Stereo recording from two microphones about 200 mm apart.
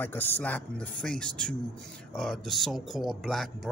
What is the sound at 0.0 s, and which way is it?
Speech, 10° left (ahead or behind).